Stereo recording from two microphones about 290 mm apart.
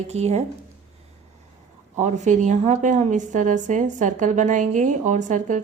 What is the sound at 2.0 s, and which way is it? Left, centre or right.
A woman's voice, right.